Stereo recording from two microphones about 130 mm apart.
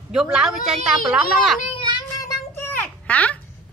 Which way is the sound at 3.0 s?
10° left (ahead or behind).